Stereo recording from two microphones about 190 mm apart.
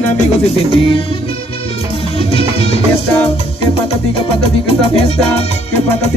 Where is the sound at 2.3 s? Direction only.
30° left (ahead or behind).